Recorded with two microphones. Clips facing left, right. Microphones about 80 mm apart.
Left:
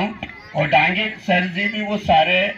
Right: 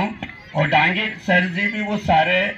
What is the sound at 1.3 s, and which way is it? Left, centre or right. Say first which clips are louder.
Speech: right 1 dB; right.